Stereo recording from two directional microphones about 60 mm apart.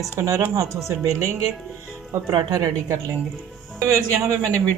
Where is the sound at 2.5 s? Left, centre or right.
Right.